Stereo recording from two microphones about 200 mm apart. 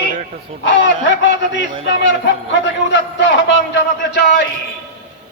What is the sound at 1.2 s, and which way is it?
Speech, 60° left (ahead or behind).